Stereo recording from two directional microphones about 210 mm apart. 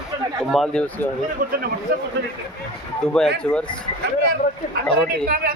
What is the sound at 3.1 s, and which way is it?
Speech, 5° left (ahead or behind).